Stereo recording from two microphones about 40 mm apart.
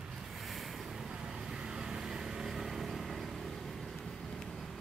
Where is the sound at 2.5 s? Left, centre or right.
Centre.